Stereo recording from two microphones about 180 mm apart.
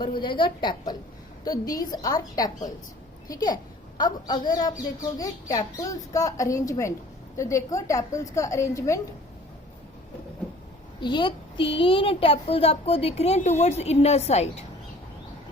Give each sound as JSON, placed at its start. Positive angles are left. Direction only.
{"t": 0.0, "sound": "a woman's voice", "side_deg": 25}
{"t": 11.0, "sound": "a woman's voice", "side_deg": 25}